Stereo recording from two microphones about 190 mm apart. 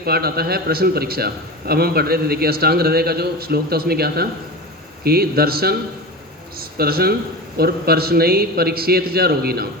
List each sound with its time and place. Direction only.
0.0 s a man's voice: 55° right (ahead or behind)